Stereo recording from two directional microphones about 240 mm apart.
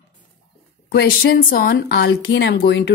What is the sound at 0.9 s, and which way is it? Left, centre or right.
A woman's voice, left.